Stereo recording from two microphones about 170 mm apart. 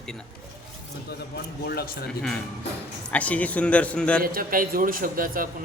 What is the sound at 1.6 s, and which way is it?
Speech, 65° left (ahead or behind).